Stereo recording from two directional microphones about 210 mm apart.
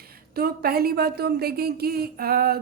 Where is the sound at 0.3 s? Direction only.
45° right (ahead or behind).